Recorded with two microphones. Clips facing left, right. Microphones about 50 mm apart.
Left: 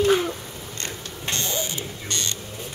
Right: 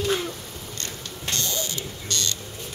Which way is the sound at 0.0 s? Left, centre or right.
Left.